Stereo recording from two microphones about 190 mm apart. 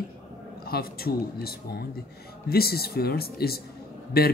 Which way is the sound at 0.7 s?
55° left (ahead or behind).